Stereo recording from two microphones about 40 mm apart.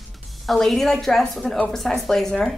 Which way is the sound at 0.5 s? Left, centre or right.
Centre.